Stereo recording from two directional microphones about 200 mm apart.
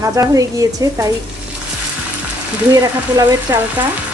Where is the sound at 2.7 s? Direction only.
15° right (ahead or behind).